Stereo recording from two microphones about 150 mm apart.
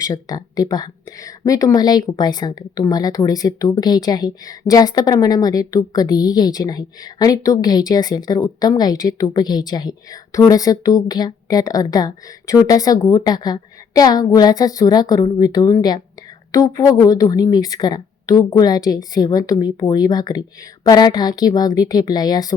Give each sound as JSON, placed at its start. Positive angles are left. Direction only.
{"t": 0.0, "sound": "speech", "side_deg": 25}